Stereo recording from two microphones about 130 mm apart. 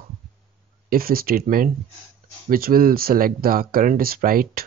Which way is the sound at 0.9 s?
90° right.